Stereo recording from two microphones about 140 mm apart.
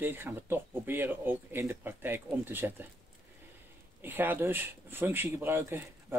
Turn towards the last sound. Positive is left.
turn(degrees=-15)  # may be behind; listen again after turning